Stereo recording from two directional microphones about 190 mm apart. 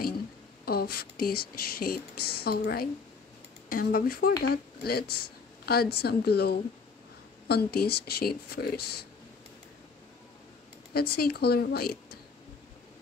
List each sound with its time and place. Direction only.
0.7 s speech: 55° left (ahead or behind)
10.9 s speech: 55° left (ahead or behind)